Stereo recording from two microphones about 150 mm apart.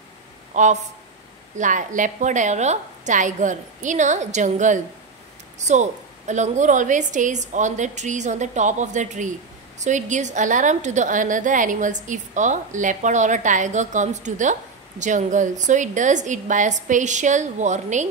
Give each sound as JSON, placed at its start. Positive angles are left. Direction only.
{"t": 0.5, "sound": "a woman's voice", "side_deg": -55}